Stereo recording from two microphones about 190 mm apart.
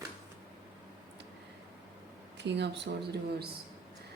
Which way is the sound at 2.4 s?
65° right (ahead or behind).